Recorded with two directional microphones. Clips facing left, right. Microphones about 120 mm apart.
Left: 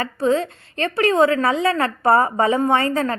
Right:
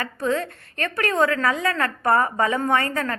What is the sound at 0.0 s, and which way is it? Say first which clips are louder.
A woman's voice: left 5 dB; 25° left (ahead or behind).